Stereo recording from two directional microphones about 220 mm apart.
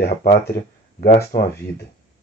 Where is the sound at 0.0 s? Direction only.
45° left (ahead or behind).